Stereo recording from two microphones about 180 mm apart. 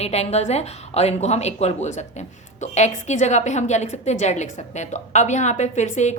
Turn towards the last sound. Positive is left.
turn(degrees=40)  # may be behind; listen again after turning